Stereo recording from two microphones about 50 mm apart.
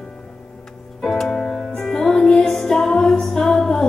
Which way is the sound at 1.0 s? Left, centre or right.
Centre.